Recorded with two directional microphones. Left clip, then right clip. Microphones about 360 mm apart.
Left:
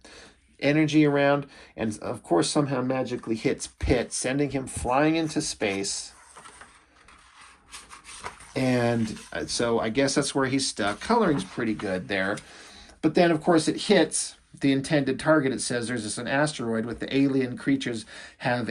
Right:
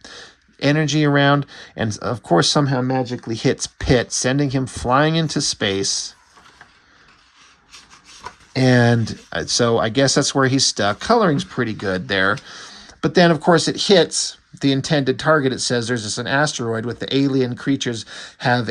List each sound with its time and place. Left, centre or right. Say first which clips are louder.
0.6 s speech: right 3 dB; right
4.9 s speech: right 6 dB; right
5.8 s speech: right 10 dB; right
8.6 s speech: right 9 dB; right